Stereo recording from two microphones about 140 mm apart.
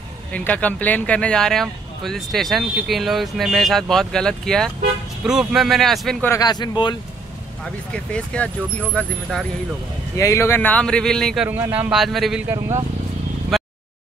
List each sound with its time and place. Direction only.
0.3 s speech: 10° left (ahead or behind)
6.4 s speech: 30° left (ahead or behind)
7.9 s speech: 5° left (ahead or behind)
10.1 s speech: 20° left (ahead or behind); by 11.4 s 5° left (ahead or behind)
11.4 s speech: 10° right (ahead or behind)
12.0 s speech: centre (ahead or behind)
12.4 s speech: 20° right (ahead or behind)
13.5 s a sound: centre (ahead or behind)